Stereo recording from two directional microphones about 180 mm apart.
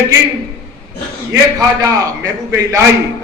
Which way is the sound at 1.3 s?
20° right (ahead or behind).